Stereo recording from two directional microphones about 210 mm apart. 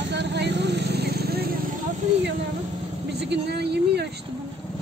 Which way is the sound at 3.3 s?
55° right (ahead or behind).